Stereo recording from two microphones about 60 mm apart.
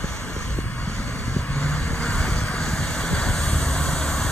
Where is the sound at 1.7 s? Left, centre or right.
Centre.